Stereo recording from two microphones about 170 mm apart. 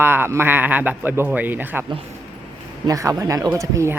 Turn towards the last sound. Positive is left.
turn(degrees=-15)  # may be behind; listen again after turning